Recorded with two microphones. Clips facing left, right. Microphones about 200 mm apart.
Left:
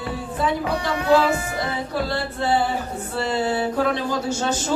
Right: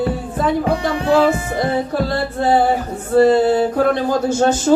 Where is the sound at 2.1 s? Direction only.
45° right (ahead or behind).